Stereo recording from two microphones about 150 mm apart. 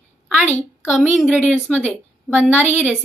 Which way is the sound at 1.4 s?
10° right (ahead or behind).